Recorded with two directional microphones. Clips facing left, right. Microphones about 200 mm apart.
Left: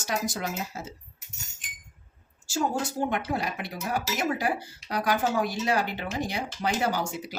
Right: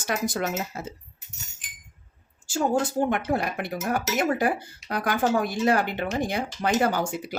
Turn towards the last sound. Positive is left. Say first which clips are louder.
# right 3 dB
turn(degrees=-55)  # may be behind; listen again after turning